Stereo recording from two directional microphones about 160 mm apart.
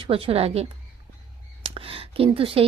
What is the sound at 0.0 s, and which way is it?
Speech, 35° right (ahead or behind).